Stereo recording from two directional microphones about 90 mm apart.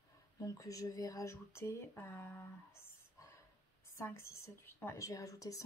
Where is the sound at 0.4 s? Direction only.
40° left (ahead or behind).